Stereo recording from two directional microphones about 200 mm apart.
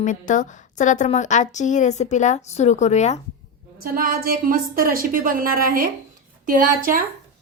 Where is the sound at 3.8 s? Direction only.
45° right (ahead or behind).